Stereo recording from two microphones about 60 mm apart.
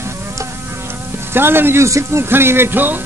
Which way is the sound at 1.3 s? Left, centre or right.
Right.